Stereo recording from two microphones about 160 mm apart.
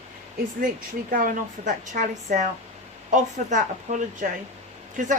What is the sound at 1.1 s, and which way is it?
A woman's voice, 55° right (ahead or behind).